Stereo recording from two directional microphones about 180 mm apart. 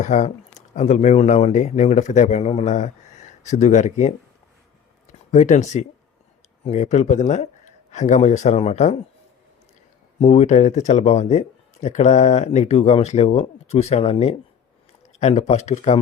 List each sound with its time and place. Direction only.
0.0 s speech: 40° left (ahead or behind)
5.3 s speech: 40° left (ahead or behind)
10.2 s speech: 40° left (ahead or behind)